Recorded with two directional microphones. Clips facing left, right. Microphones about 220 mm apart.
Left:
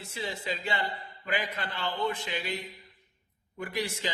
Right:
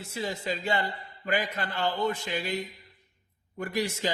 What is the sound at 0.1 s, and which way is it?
Speech, 45° right (ahead or behind).